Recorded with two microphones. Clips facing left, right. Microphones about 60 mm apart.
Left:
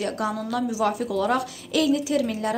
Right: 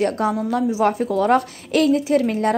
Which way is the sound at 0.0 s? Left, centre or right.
Right.